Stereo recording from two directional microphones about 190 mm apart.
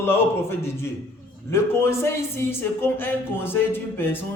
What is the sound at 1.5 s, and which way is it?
A man's voice, 15° left (ahead or behind).